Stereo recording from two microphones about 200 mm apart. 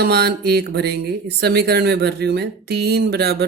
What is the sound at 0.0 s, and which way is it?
Speech, 55° right (ahead or behind).